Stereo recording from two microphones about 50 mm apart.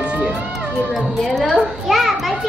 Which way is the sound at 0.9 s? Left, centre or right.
Centre.